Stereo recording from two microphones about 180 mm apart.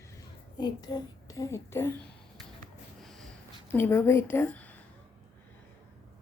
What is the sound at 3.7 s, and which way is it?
Speech, 15° left (ahead or behind).